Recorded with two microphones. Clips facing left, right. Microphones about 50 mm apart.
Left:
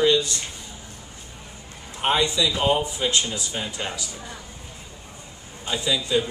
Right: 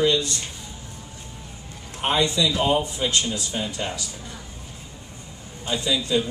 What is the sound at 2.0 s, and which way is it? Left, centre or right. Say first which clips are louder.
Mantra: even; centre.